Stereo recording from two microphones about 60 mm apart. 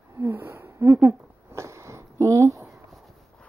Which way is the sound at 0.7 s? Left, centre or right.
Right.